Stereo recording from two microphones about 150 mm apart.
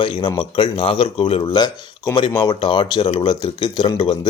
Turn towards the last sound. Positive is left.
turn(degrees=35)  # may be behind; listen again after turning